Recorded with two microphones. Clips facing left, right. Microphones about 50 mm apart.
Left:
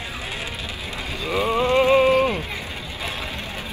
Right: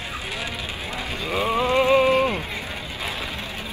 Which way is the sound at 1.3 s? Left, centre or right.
Right.